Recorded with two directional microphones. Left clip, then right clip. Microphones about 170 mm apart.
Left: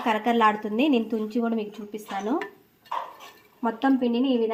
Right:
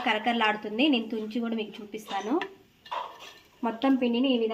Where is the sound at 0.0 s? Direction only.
50° left (ahead or behind).